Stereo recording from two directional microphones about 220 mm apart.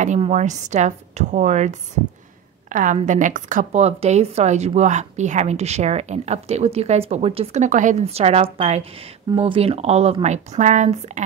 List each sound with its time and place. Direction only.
0.0 s a woman's voice: 30° right (ahead or behind)